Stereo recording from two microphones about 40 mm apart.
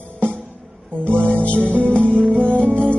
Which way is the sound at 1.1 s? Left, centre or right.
Right.